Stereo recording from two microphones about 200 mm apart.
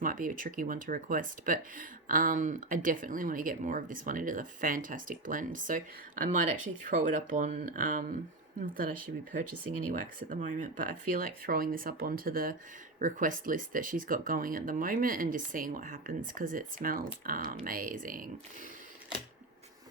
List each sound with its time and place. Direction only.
0.0 s speech: 45° right (ahead or behind)
9.9 s speech: 40° right (ahead or behind)